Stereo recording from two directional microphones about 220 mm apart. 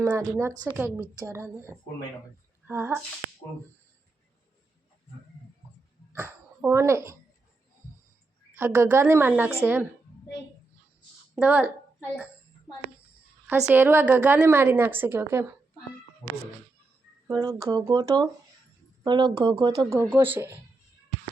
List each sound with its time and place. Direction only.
0.0 s a woman's voice: 10° right (ahead or behind)
6.1 s speech: 10° right (ahead or behind)
8.5 s a woman's voice: 10° right (ahead or behind)
11.3 s a child's voice: 5° right (ahead or behind)
13.7 s a woman's voice: 10° right (ahead or behind)
17.2 s a woman's voice: 15° right (ahead or behind)